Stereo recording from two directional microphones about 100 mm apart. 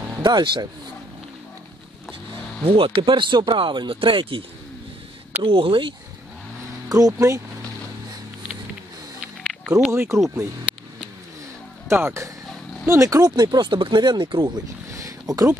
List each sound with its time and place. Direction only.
0.2 s speech: 50° right (ahead or behind)
2.6 s speech: 70° right (ahead or behind)
6.9 s speech: 35° right (ahead or behind)
9.5 s a sound: 5° right (ahead or behind)
9.9 s speech: 30° right (ahead or behind)
11.9 s speech: 30° right (ahead or behind)
13.5 s speech: 50° right (ahead or behind)
14.9 s a sound: 30° right (ahead or behind)